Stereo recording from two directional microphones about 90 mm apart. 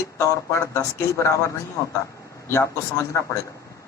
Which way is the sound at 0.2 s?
30° left (ahead or behind).